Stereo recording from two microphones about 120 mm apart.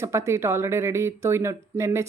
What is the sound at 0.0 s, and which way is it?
Speech, 25° right (ahead or behind).